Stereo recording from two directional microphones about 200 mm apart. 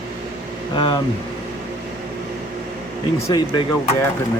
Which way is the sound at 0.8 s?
25° left (ahead or behind).